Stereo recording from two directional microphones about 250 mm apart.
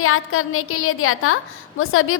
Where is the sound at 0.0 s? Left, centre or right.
Left.